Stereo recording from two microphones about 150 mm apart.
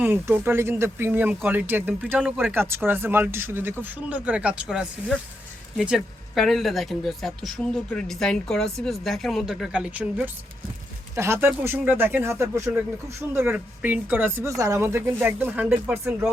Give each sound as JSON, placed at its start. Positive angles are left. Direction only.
{"t": 0.0, "sound": "speech", "side_deg": -15}